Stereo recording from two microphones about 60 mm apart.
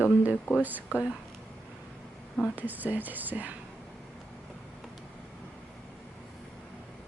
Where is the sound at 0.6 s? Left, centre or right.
Right.